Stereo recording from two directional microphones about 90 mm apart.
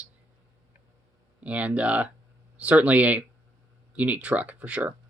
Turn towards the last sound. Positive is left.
turn(degrees=-15)  # may be behind; listen again after turning